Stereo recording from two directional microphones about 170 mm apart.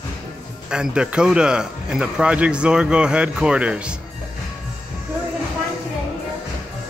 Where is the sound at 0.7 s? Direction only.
5° right (ahead or behind).